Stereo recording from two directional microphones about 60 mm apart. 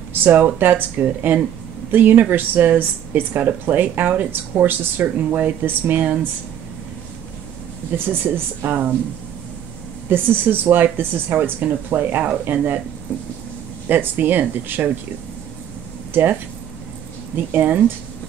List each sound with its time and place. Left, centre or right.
0.1 s speech: right
8.6 s speech: right
10.0 s speech: right
13.8 s speech: right
16.1 s speech: right
17.5 s speech: right